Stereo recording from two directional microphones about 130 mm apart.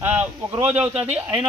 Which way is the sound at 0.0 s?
15° right (ahead or behind).